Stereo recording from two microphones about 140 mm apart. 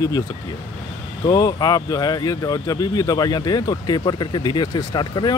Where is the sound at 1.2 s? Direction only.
25° left (ahead or behind).